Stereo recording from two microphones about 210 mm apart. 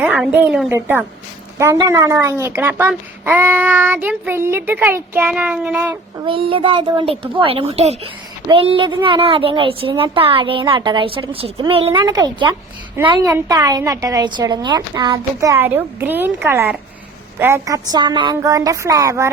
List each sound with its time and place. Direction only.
0.0 s a woman's voice: 5° right (ahead or behind)
6.2 s a child's voice: 25° right (ahead or behind)